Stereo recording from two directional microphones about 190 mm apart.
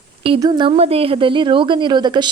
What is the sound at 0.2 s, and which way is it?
Speech, 25° right (ahead or behind).